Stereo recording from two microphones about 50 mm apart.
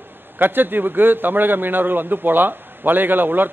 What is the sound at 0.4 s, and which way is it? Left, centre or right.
A man's voice, right.